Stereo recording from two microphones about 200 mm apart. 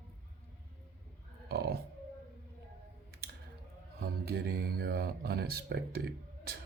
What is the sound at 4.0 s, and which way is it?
Speech, 50° right (ahead or behind).